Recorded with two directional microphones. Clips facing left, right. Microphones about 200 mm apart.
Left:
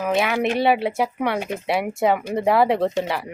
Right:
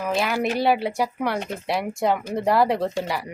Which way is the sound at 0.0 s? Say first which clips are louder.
Left 3 dB; centre (ahead or behind).